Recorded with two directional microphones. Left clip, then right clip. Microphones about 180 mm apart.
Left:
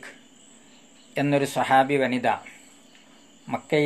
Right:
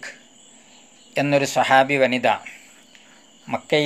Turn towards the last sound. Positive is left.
turn(degrees=-20)  # may be behind; listen again after turning